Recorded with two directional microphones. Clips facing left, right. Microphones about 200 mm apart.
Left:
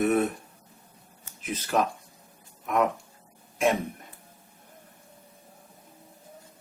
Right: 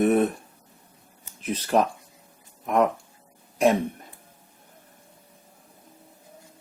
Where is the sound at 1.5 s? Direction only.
35° right (ahead or behind).